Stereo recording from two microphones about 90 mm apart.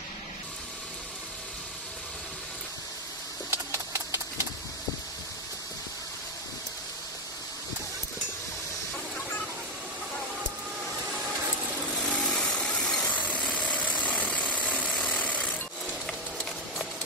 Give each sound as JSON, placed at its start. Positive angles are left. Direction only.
{"t": 3.4, "sound": "a sound", "side_deg": -30}
{"t": 12.0, "sound": "vehicle", "side_deg": 5}
{"t": 13.1, "sound": "jackhammer", "side_deg": 15}